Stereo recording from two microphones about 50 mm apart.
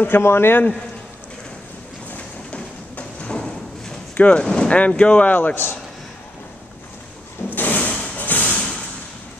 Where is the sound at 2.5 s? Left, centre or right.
Left.